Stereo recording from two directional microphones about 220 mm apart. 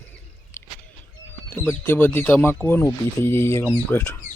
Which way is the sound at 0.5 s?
10° left (ahead or behind).